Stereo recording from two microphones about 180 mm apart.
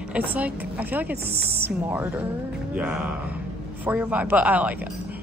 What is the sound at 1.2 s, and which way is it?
Speech, 60° right (ahead or behind).